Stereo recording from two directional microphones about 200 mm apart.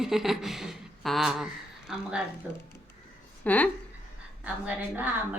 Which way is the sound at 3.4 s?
5° left (ahead or behind).